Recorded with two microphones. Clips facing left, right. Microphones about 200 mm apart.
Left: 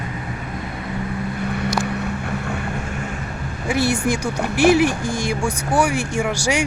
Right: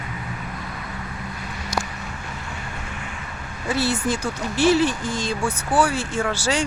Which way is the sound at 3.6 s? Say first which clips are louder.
Left 3 dB; 10° left (ahead or behind).